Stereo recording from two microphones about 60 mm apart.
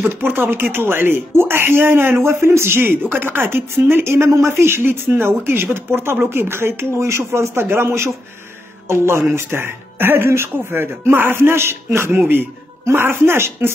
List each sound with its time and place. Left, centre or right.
0.0 s a woman's voice: right